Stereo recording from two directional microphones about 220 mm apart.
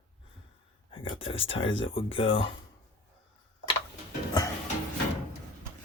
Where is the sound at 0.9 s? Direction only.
25° left (ahead or behind).